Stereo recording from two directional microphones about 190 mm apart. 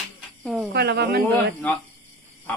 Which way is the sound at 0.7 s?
60° right (ahead or behind).